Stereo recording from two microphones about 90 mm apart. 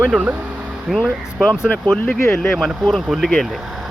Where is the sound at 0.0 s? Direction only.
15° right (ahead or behind).